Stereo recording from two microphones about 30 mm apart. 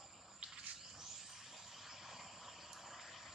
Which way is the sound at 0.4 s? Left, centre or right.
Right.